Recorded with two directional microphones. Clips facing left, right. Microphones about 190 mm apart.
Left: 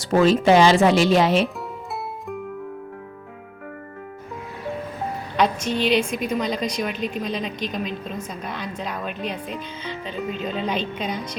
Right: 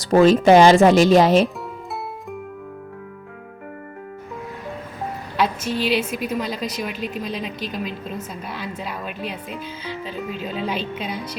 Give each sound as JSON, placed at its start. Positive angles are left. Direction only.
{"t": 0.0, "sound": "speech", "side_deg": -40}
{"t": 5.4, "sound": "a woman's voice", "side_deg": -5}